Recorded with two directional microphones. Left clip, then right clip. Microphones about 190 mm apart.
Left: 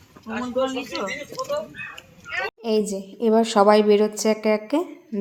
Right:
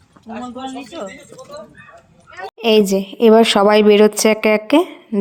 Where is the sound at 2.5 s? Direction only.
35° right (ahead or behind).